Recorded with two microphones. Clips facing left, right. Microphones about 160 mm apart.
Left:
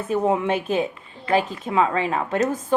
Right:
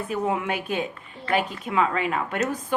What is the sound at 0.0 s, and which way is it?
Speech, 25° left (ahead or behind).